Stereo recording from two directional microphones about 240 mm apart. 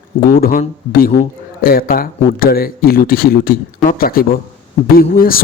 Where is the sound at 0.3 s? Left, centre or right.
Left.